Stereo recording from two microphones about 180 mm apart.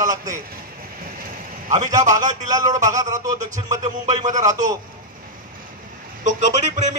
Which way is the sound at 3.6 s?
20° right (ahead or behind).